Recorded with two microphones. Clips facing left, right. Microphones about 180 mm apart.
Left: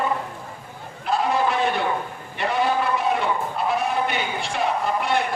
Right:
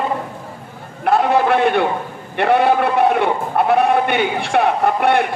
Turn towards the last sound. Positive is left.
turn(degrees=-60)  # may be behind; listen again after turning